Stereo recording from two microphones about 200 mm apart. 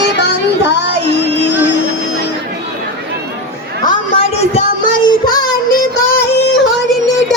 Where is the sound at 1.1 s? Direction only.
60° left (ahead or behind).